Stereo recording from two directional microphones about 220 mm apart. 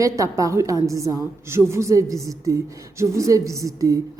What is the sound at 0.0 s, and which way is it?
A woman's voice, 15° right (ahead or behind).